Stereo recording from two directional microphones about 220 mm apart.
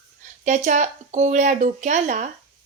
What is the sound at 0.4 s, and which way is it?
A woman's voice, 35° right (ahead or behind).